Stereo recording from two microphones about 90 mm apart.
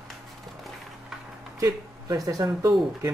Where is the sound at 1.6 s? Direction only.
40° right (ahead or behind).